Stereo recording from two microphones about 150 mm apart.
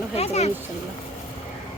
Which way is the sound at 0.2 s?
45° left (ahead or behind).